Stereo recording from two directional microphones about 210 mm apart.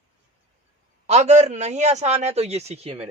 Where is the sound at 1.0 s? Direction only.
35° right (ahead or behind).